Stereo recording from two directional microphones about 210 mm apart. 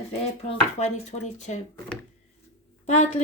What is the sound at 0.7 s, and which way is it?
Speech, 35° left (ahead or behind).